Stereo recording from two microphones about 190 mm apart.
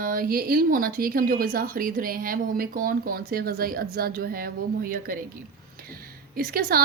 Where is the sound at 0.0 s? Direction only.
50° right (ahead or behind).